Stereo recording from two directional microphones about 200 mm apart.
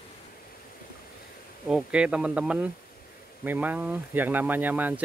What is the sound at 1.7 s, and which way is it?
Speech, 5° right (ahead or behind).